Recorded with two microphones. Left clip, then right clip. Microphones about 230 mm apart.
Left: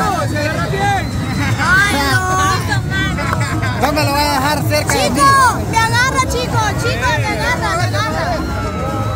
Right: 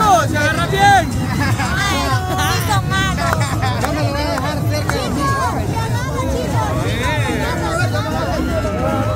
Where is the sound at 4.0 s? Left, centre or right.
Left.